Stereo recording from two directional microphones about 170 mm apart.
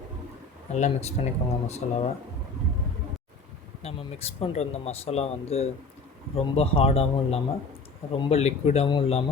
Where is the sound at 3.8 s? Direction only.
35° left (ahead or behind).